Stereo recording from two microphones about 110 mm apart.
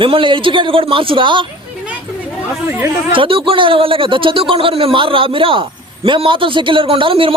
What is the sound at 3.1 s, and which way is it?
A man's voice, 55° right (ahead or behind).